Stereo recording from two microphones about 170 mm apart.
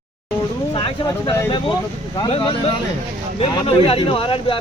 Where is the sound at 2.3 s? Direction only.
30° left (ahead or behind).